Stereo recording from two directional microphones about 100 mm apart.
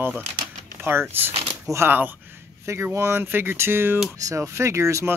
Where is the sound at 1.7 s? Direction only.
25° right (ahead or behind).